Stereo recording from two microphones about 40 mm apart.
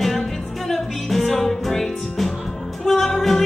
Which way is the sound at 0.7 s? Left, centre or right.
Centre.